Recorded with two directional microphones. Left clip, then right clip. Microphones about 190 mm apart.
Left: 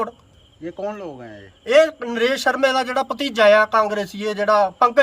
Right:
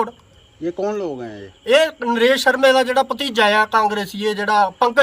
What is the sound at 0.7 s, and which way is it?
Speech, 50° right (ahead or behind).